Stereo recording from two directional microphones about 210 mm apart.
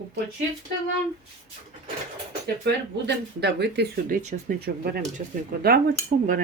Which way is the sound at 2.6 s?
55° right (ahead or behind).